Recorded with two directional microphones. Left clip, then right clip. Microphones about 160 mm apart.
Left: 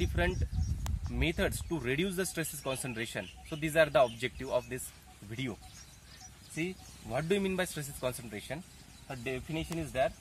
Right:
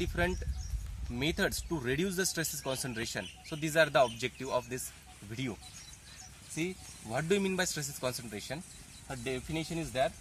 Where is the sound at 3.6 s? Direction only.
45° left (ahead or behind).